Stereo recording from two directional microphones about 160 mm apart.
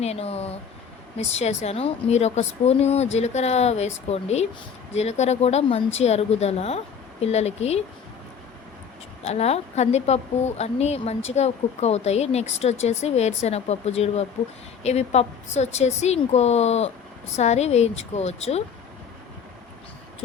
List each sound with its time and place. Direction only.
0.0 s a woman's voice: 40° left (ahead or behind)
9.2 s a woman's voice: 40° left (ahead or behind)